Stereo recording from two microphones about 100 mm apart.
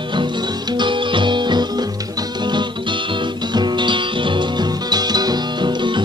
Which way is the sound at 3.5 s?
50° right (ahead or behind).